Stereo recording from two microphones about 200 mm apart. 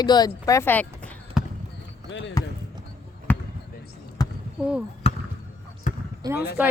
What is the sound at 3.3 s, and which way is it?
Basketball bounce, 10° left (ahead or behind).